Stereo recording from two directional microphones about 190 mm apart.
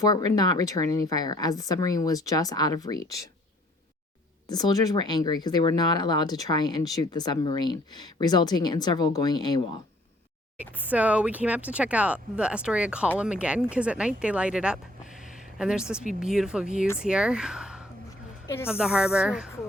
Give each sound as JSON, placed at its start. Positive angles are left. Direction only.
{"t": 0.0, "sound": "a woman's voice", "side_deg": 20}
{"t": 4.4, "sound": "a woman's voice", "side_deg": 20}
{"t": 10.8, "sound": "speech", "side_deg": -10}
{"t": 18.4, "sound": "speech", "side_deg": 10}
{"t": 18.7, "sound": "speech", "side_deg": -5}